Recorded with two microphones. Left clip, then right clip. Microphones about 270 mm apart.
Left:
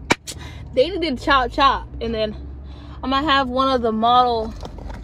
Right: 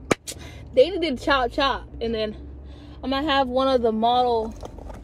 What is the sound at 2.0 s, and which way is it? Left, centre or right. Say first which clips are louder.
Speech: left 3 dB; centre.